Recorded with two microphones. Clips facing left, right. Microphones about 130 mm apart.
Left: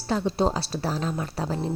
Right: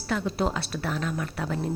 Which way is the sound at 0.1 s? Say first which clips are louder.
Left 3 dB; 30° left (ahead or behind).